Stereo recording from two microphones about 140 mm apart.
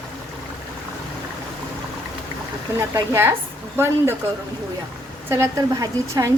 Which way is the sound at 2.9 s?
15° right (ahead or behind).